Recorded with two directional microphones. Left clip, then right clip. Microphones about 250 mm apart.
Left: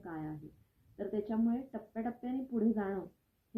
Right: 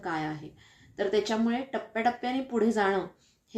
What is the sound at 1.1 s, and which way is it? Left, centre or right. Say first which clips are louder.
Speech: right 8 dB; centre.